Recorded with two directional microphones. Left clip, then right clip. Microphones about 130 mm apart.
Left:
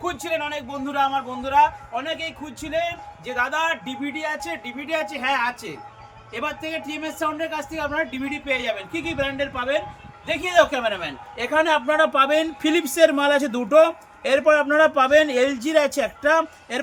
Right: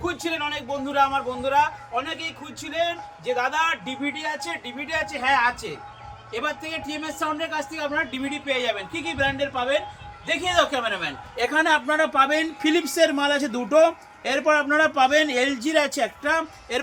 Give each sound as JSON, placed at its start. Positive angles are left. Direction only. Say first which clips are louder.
{"t": 0.0, "sound": "a man's voice", "louder": "left 1 dB", "side_deg": 25}
{"t": 11.3, "sound": "a man's voice", "louder": "left 1 dB", "side_deg": 40}